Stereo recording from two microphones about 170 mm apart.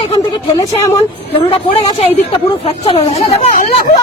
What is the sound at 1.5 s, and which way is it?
A man's voice, 30° left (ahead or behind).